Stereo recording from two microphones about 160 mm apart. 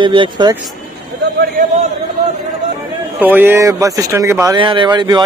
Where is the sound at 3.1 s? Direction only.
10° right (ahead or behind).